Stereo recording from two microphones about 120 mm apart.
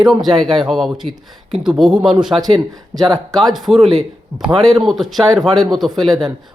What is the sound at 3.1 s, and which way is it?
Speech, 5° left (ahead or behind).